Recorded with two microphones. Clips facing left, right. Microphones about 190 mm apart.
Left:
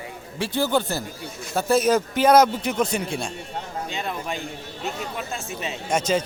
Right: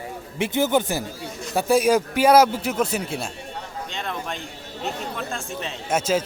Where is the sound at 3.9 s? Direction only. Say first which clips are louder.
Even; 5° left (ahead or behind).